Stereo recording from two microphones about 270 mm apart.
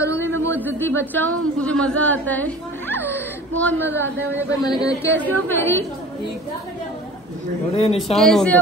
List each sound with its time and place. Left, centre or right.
0.0 s a sound: centre
0.7 s a woman's voice: centre
7.7 s speech: left
8.1 s speech: centre